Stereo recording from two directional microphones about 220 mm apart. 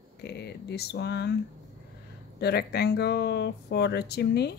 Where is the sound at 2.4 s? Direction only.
45° left (ahead or behind).